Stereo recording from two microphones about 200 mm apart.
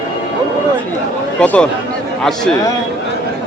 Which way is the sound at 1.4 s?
5° left (ahead or behind).